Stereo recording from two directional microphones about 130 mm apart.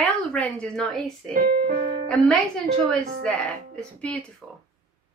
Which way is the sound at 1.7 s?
90° right.